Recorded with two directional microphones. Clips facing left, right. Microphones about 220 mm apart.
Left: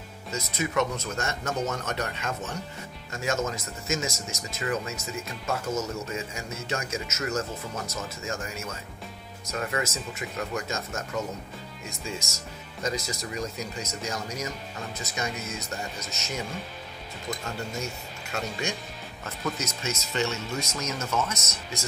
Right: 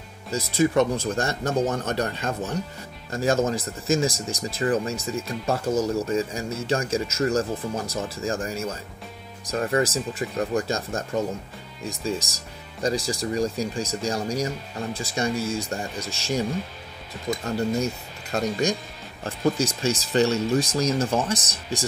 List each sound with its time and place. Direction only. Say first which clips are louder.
0.3 s speech: right 9 dB; 30° right (ahead or behind)